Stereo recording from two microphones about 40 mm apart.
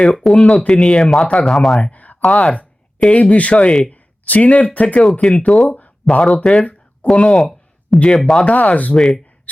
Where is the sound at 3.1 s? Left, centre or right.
Left.